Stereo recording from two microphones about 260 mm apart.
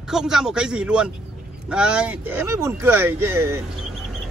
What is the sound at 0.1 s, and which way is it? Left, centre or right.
Speech, centre.